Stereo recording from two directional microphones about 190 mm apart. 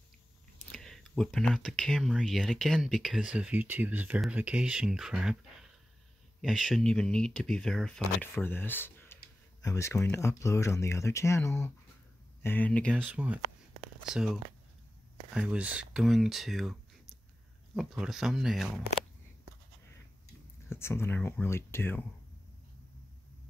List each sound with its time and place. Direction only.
0.7 s speech: 5° left (ahead or behind)
6.4 s speech: centre (ahead or behind)
13.0 s speech: 5° right (ahead or behind)
17.7 s speech: centre (ahead or behind)
20.7 s speech: 15° left (ahead or behind)